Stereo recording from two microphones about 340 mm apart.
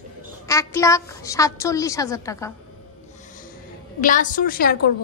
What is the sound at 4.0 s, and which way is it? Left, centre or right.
Speech, left.